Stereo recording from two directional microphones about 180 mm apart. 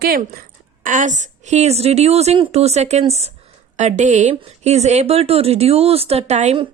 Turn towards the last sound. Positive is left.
turn(degrees=-35)  # may be behind; listen again after turning